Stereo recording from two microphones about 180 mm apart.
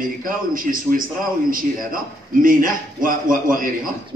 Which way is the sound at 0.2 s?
50° right (ahead or behind).